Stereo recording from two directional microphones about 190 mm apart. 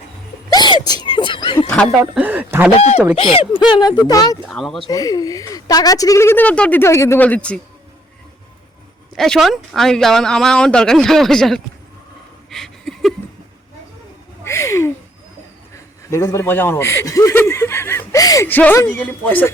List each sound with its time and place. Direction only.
0.5 s speech: 20° left (ahead or behind)
1.5 s speech: 5° left (ahead or behind)
2.1 s speech: 10° right (ahead or behind)
2.7 s speech: 35° left (ahead or behind); by 4.4 s 20° left (ahead or behind)
4.4 s speech: centre (ahead or behind)
4.9 s speech: 20° left (ahead or behind)
9.1 s speech: centre (ahead or behind)
12.5 s a sound: centre (ahead or behind)
14.4 s a sound: 15° left (ahead or behind)
16.0 s speech: 15° left (ahead or behind)